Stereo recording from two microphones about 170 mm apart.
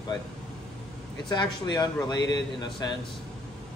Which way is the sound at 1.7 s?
25° left (ahead or behind).